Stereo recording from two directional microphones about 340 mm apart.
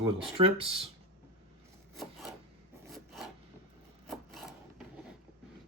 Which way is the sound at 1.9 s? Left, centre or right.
Centre.